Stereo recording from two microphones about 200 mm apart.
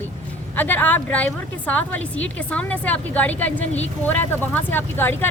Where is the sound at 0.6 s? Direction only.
10° left (ahead or behind).